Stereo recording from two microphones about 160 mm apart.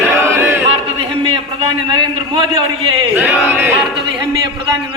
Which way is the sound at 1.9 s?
30° right (ahead or behind).